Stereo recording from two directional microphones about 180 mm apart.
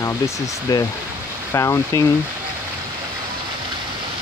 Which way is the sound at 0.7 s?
20° left (ahead or behind).